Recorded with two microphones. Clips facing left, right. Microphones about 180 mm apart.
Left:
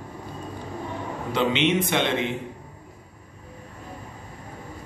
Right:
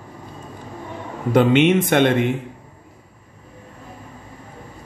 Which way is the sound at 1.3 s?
50° right (ahead or behind).